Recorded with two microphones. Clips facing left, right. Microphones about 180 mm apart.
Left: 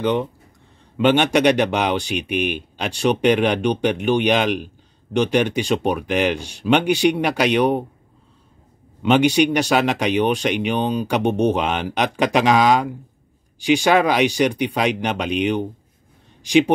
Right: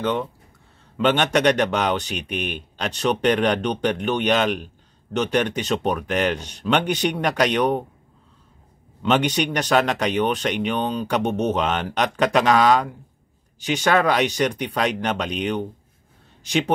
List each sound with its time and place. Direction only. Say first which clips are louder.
0.0 s speech: left 3 dB; 15° left (ahead or behind)
9.0 s speech: left 5 dB; 10° left (ahead or behind)